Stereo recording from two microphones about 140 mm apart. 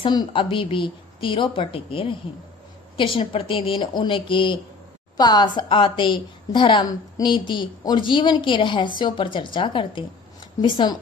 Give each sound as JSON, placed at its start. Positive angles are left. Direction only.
{"t": 0.0, "sound": "a woman's voice", "side_deg": 35}